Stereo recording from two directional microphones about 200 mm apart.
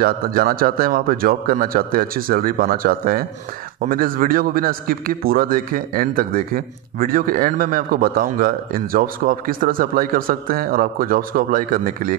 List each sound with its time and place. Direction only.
0.0 s a man's voice: 45° right (ahead or behind)